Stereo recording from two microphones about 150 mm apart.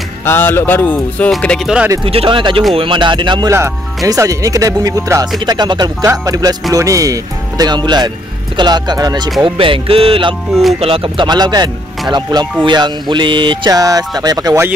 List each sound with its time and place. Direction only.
0.2 s speech: 15° left (ahead or behind)
2.0 s speech: 35° right (ahead or behind)
3.4 s speech: 20° right (ahead or behind)